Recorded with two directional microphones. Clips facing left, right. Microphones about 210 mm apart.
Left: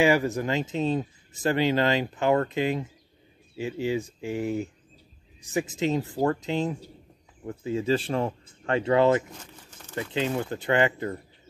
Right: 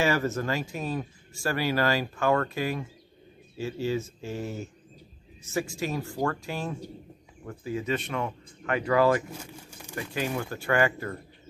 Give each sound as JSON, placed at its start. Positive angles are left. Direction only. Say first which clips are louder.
{"t": 0.0, "sound": "speech", "louder": "left 4 dB", "side_deg": 15}
{"t": 9.3, "sound": "pigeon", "louder": "right 4 dB", "side_deg": -10}
{"t": 9.9, "sound": "speech", "louder": "left 3 dB", "side_deg": 20}